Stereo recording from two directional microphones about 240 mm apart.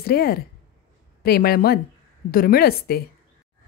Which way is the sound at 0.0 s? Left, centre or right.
Left.